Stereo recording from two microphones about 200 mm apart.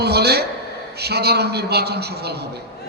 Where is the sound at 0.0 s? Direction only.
55° right (ahead or behind).